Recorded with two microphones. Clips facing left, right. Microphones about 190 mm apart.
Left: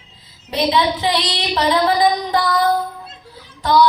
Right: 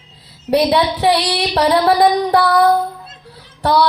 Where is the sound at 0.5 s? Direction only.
65° right (ahead or behind).